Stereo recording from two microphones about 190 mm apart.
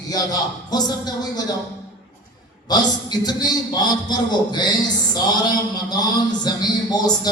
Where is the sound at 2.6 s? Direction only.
20° left (ahead or behind).